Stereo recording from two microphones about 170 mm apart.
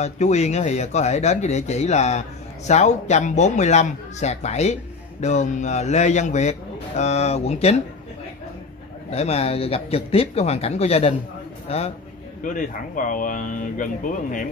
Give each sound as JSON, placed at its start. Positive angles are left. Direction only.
{"t": 0.0, "sound": "speech", "side_deg": 40}
{"t": 9.1, "sound": "speech", "side_deg": 35}
{"t": 12.4, "sound": "speech", "side_deg": 50}